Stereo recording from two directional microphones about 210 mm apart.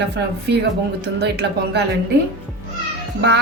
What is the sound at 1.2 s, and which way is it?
Speech, 50° right (ahead or behind).